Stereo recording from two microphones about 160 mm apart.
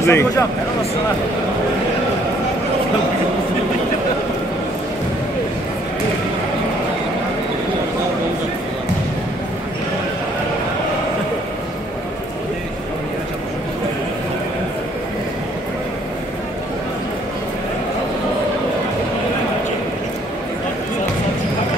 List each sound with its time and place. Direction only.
0.0 s speech: 15° left (ahead or behind)